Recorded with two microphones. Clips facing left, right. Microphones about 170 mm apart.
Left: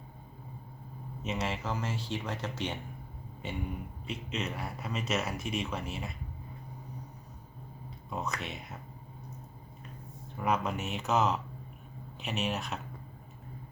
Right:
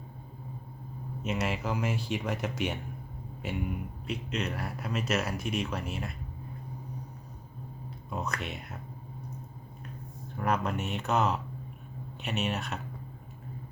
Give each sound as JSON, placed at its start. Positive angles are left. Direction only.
{"t": 1.2, "sound": "speech", "side_deg": -5}
{"t": 4.0, "sound": "speech", "side_deg": 0}
{"t": 8.1, "sound": "speech", "side_deg": 0}
{"t": 10.3, "sound": "speech", "side_deg": 0}